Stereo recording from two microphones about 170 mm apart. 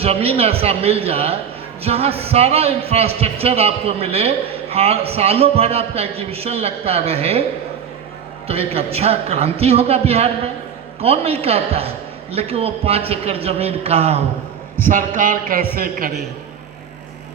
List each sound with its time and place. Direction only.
0.0 s speech: 35° right (ahead or behind)
8.4 s speech: 35° right (ahead or behind)
14.8 s a man's voice: 55° right (ahead or behind)